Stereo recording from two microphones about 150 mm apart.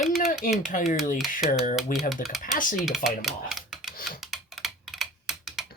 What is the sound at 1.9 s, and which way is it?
Speech, 70° left (ahead or behind).